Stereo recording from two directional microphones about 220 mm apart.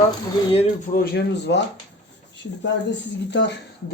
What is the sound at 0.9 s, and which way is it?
Speech, 45° left (ahead or behind).